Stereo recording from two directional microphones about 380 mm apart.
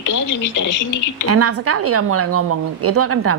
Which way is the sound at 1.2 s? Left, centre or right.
Right.